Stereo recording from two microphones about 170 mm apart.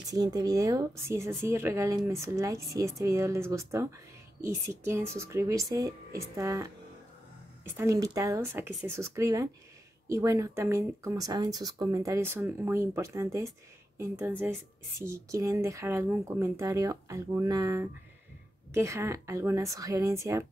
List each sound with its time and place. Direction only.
0.1 s speech: 25° right (ahead or behind)
7.7 s speech: 20° right (ahead or behind)